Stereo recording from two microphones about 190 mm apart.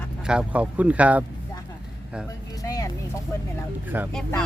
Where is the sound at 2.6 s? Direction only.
20° left (ahead or behind).